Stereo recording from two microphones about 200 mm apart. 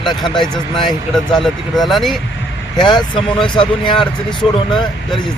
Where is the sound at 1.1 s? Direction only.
Centre (ahead or behind).